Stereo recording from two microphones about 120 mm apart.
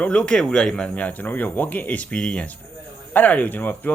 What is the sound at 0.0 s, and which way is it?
Speech, 10° left (ahead or behind).